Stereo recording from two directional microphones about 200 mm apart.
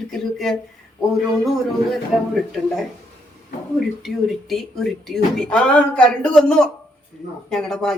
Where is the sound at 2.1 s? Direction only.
Centre (ahead or behind).